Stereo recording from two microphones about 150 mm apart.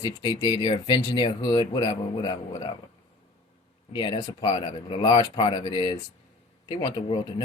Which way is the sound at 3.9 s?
35° left (ahead or behind).